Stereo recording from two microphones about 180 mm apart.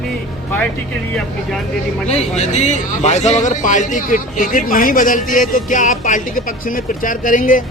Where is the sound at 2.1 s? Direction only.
40° left (ahead or behind).